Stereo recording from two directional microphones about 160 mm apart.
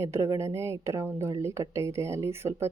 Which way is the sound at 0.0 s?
20° right (ahead or behind).